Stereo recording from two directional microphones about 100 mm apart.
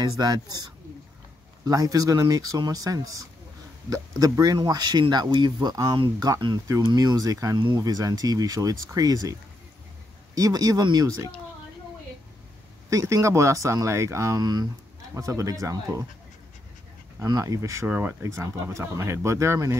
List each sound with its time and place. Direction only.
0.0 s speech: 40° right (ahead or behind)
10.3 s speech: 35° right (ahead or behind)
12.9 s speech: 30° right (ahead or behind)
14.4 s speech: 45° right (ahead or behind)
17.2 s speech: 35° right (ahead or behind)
17.8 s speech: 15° right (ahead or behind)
18.2 s speech: 30° right (ahead or behind)